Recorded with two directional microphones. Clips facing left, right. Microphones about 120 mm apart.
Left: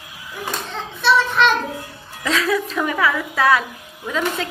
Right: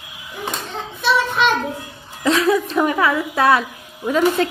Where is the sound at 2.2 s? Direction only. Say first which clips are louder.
Right 4 dB; 25° right (ahead or behind).